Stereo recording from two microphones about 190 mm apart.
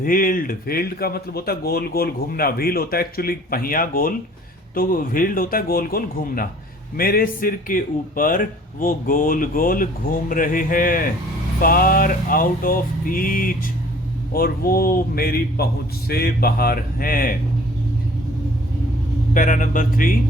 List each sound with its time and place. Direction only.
0.0 s a man's voice: 45° left (ahead or behind)
19.3 s a man's voice: 45° left (ahead or behind)